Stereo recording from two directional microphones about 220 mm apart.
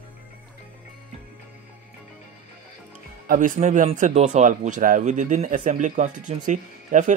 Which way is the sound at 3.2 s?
35° right (ahead or behind).